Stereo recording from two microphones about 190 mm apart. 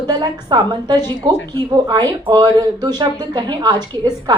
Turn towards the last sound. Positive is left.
turn(degrees=-20)  # may be behind; listen again after turning